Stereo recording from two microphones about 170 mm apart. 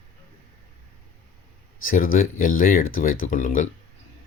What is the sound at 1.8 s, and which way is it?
Speech, 55° left (ahead or behind).